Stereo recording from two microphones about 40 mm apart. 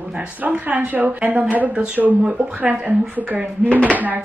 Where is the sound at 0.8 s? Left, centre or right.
Right.